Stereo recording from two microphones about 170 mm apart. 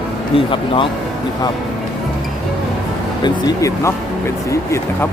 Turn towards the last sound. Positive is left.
turn(degrees=20)  # may be behind; listen again after turning